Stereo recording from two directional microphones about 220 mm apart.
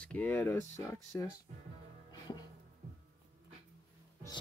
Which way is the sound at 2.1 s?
20° left (ahead or behind).